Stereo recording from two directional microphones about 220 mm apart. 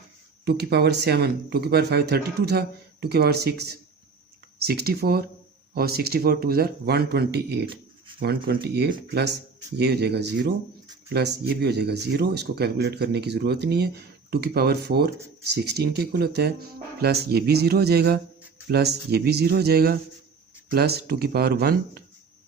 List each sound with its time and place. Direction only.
0.4 s speech: 50° right (ahead or behind)
4.6 s speech: 45° right (ahead or behind)